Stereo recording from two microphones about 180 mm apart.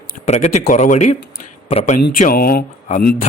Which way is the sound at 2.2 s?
50° left (ahead or behind).